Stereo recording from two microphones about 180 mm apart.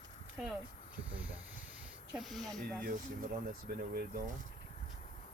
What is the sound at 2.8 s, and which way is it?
Speech, 50° right (ahead or behind).